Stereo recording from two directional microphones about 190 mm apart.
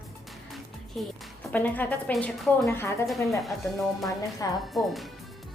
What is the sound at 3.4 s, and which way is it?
Speech, centre (ahead or behind).